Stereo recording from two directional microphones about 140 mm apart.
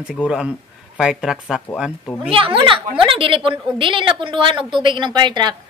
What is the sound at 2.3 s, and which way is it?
A woman's voice, 40° right (ahead or behind).